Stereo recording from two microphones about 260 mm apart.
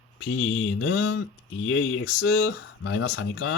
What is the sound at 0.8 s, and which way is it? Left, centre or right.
Speech, left.